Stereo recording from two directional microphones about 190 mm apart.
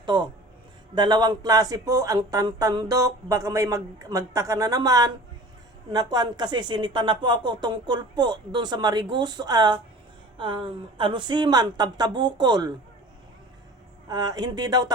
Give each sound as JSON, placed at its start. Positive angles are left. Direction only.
{"t": 0.0, "sound": "speech", "side_deg": -25}
{"t": 14.1, "sound": "speech", "side_deg": -20}